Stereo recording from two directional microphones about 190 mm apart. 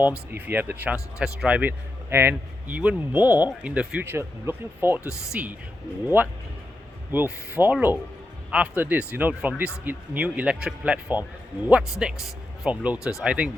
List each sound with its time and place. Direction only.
0.3 s a man's voice: 10° right (ahead or behind)